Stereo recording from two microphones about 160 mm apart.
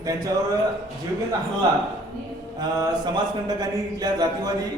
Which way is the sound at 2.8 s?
25° right (ahead or behind).